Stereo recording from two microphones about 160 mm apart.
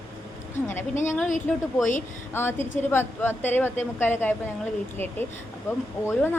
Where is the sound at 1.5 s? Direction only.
10° left (ahead or behind).